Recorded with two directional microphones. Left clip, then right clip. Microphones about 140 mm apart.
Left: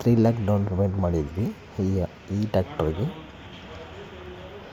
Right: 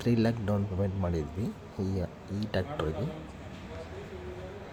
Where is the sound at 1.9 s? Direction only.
30° left (ahead or behind).